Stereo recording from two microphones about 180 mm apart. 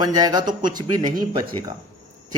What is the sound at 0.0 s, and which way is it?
Speech, 20° right (ahead or behind).